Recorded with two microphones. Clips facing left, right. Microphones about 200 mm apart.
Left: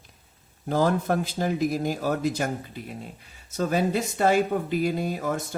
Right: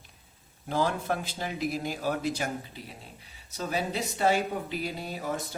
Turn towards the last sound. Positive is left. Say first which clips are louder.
# left 7 dB
turn(degrees=50)  # may be behind; listen again after turning